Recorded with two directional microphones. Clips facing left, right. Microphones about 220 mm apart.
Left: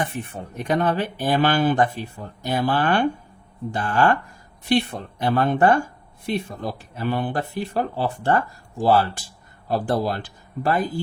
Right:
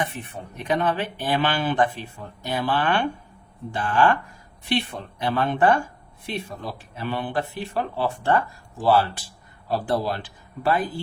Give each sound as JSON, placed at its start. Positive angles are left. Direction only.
{"t": 0.0, "sound": "speech", "side_deg": 45}